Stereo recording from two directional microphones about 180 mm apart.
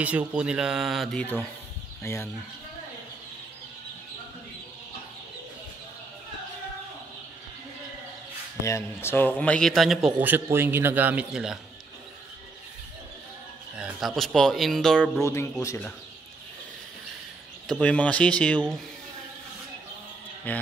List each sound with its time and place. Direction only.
0.0 s a man's voice: 5° right (ahead or behind)
2.1 s speech: 15° left (ahead or behind)
8.6 s a man's voice: 15° left (ahead or behind); by 11.6 s 5° right (ahead or behind)
13.7 s a man's voice: 5° right (ahead or behind)
15.2 s speech: 15° left (ahead or behind)
17.6 s speech: 5° left (ahead or behind)
20.5 s speech: 10° left (ahead or behind)